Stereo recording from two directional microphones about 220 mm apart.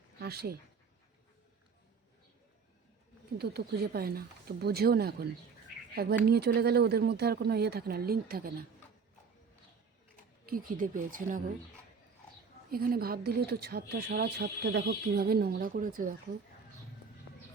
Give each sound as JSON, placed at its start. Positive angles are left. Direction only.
{"t": 0.2, "sound": "speech", "side_deg": -45}
{"t": 3.3, "sound": "speech", "side_deg": -50}
{"t": 10.4, "sound": "speech", "side_deg": -40}
{"t": 12.7, "sound": "speech", "side_deg": -40}